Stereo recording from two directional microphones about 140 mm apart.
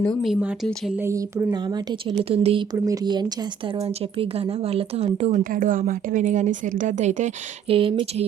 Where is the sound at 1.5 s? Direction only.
30° right (ahead or behind).